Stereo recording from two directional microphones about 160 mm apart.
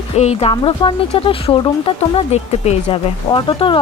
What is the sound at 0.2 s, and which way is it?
Speech, 40° left (ahead or behind).